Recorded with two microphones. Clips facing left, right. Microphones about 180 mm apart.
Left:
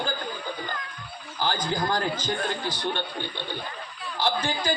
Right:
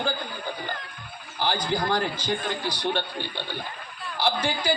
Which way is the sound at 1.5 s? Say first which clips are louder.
Right 2 dB; 45° left (ahead or behind).